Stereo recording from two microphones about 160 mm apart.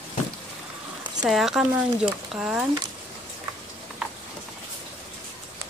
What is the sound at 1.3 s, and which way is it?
Speech, centre (ahead or behind).